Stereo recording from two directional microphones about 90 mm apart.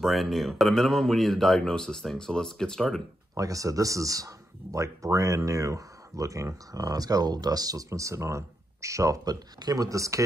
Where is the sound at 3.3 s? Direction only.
40° right (ahead or behind).